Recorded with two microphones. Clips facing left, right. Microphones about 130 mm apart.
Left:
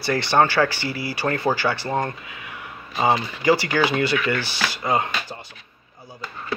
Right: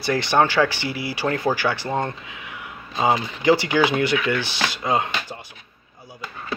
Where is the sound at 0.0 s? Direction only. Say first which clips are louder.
Even; 15° right (ahead or behind).